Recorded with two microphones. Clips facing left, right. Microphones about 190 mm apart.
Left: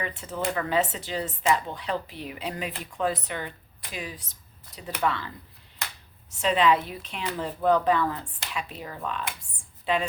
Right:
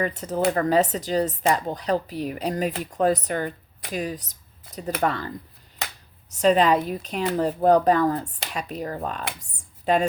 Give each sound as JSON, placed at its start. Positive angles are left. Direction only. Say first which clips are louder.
{"t": 0.0, "sound": "speech", "louder": "right 7 dB", "side_deg": -40}
{"t": 6.3, "sound": "a woman's voice", "louder": "right 4 dB", "side_deg": -40}